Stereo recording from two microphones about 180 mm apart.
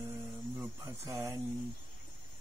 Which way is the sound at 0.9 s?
15° right (ahead or behind).